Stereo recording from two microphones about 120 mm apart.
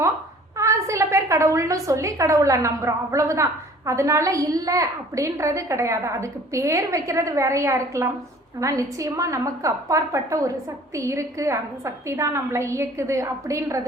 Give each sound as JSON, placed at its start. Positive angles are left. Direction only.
{"t": 0.5, "sound": "a woman's voice", "side_deg": -25}